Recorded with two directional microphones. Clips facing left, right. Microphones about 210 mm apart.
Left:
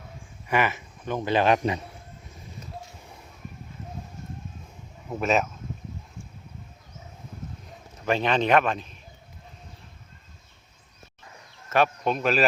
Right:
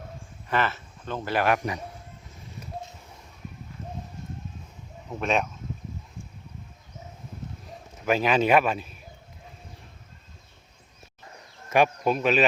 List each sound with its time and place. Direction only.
0.4 s a man's voice: 15° left (ahead or behind)
5.2 s speech: 5° left (ahead or behind)
8.0 s a man's voice: 5° right (ahead or behind)
11.7 s speech: 10° right (ahead or behind)